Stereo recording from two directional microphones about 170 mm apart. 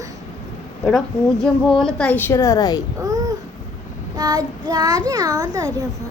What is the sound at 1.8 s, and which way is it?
A woman's voice, 5° left (ahead or behind).